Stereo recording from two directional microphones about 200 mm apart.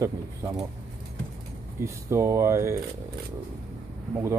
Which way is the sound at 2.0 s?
15° right (ahead or behind).